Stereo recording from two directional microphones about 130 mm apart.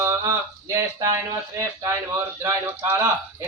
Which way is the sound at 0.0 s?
25° right (ahead or behind).